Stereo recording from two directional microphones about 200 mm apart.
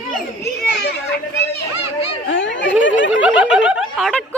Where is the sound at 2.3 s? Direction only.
70° left (ahead or behind).